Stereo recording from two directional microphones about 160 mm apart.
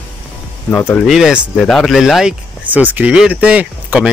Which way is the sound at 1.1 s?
5° right (ahead or behind).